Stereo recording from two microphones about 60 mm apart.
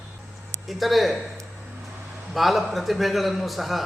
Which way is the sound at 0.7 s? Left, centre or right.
Centre.